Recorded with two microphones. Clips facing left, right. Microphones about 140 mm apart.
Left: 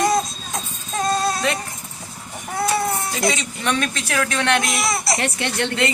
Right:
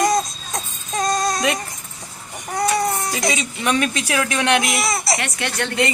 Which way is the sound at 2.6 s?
5° left (ahead or behind).